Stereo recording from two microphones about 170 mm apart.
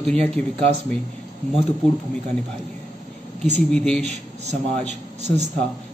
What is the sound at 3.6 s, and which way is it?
Speech, 5° left (ahead or behind).